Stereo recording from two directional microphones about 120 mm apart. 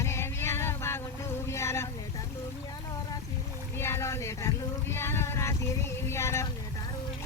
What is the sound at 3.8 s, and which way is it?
Boat, 20° left (ahead or behind).